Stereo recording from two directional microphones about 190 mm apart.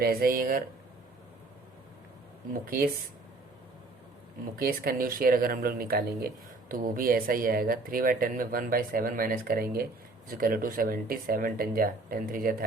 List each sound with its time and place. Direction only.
0.0 s speech: 50° right (ahead or behind)
2.5 s speech: 50° right (ahead or behind)
4.5 s speech: 50° right (ahead or behind)